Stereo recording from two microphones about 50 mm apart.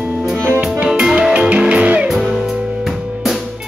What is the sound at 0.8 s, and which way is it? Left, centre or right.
Music, centre.